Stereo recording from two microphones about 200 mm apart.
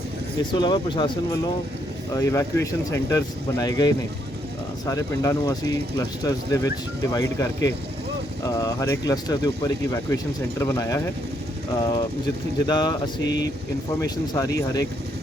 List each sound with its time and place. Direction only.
0.5 s speech: 20° left (ahead or behind)
14.0 s speech: 15° left (ahead or behind)